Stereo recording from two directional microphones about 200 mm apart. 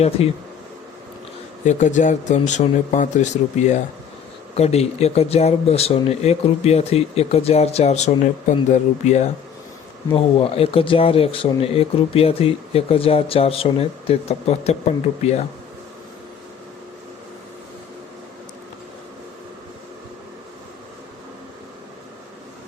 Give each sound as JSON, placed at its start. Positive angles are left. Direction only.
{"t": 0.2, "sound": "speech", "side_deg": 30}
{"t": 1.6, "sound": "speech", "side_deg": 35}